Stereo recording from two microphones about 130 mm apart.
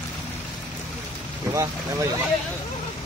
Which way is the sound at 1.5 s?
20° right (ahead or behind).